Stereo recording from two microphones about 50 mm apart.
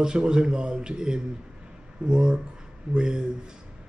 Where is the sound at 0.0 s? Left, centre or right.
Centre.